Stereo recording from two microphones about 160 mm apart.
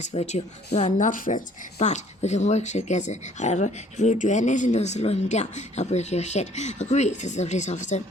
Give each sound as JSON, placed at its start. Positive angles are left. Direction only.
{"t": 0.0, "sound": "speech", "side_deg": 45}